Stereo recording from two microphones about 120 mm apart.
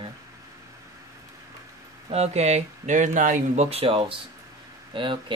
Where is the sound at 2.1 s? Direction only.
65° right (ahead or behind); by 3.7 s 85° right.